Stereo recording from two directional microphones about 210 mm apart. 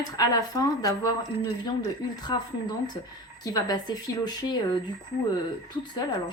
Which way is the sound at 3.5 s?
20° left (ahead or behind).